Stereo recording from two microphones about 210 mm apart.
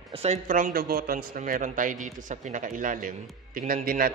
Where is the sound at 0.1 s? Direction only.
30° right (ahead or behind).